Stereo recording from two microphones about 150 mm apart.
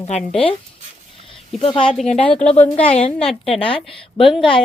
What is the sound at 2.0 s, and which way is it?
Speech, 5° left (ahead or behind).